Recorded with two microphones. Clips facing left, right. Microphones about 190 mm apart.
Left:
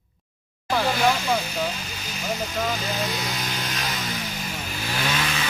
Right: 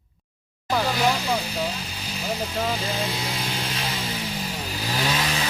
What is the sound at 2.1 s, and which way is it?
Vehicle, 30° right (ahead or behind).